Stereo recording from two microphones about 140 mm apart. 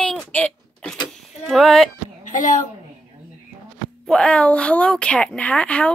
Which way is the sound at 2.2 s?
65° left (ahead or behind).